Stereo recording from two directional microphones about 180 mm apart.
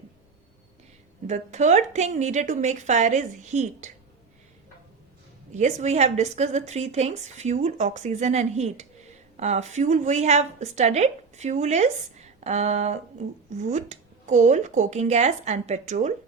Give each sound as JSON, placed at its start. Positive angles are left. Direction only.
{"t": 1.3, "sound": "a woman's voice", "side_deg": -40}
{"t": 5.5, "sound": "a woman's voice", "side_deg": -40}